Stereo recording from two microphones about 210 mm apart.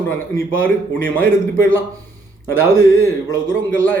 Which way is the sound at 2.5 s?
70° left (ahead or behind).